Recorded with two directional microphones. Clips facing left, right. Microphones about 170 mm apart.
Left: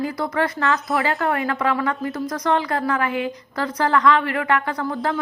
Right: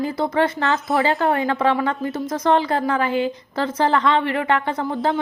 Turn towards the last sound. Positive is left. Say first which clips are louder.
# right 2 dB
turn(degrees=-25)  # may be behind; listen again after turning